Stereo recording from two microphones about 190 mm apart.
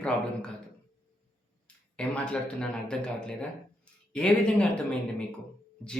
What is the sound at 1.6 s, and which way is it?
A man's voice, 5° left (ahead or behind).